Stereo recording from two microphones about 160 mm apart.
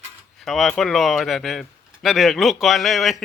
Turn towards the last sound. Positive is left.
turn(degrees=0)  # may be behind; listen again after turning